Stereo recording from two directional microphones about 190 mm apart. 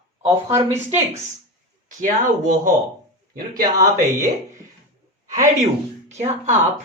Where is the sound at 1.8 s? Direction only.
45° right (ahead or behind).